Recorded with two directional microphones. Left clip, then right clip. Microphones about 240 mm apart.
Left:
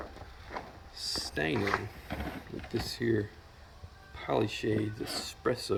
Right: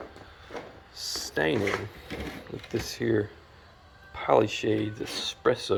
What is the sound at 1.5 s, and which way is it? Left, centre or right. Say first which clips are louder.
Speech: right 3 dB; right.